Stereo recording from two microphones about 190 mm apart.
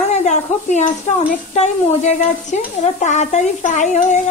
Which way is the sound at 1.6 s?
40° left (ahead or behind).